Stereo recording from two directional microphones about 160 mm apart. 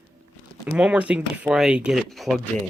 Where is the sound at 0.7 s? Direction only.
5° right (ahead or behind).